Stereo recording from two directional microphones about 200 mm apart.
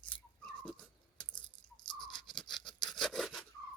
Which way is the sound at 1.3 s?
25° left (ahead or behind).